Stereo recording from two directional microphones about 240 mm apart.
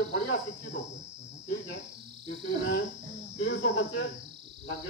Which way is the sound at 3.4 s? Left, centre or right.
Left.